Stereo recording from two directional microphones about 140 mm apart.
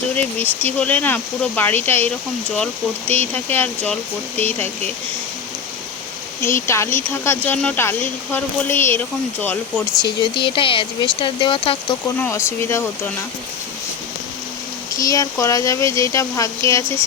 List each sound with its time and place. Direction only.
0.6 s speech: 10° left (ahead or behind)
6.7 s speech: 20° left (ahead or behind)
10.0 s speech: 35° left (ahead or behind)
12.3 s speech: 20° left (ahead or behind)
14.9 s speech: 25° left (ahead or behind)